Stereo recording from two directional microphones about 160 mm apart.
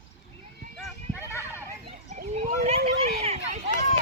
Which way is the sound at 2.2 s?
50° right (ahead or behind).